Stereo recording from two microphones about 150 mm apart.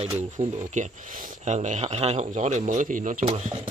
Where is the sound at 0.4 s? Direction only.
50° right (ahead or behind).